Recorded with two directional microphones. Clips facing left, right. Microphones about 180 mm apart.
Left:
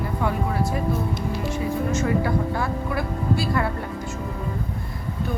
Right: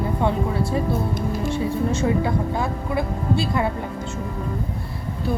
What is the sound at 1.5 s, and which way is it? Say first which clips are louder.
Speech: right 1 dB; 30° right (ahead or behind).